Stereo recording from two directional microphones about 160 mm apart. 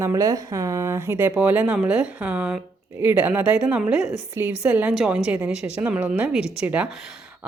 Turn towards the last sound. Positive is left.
turn(degrees=-10)  # may be behind; listen again after turning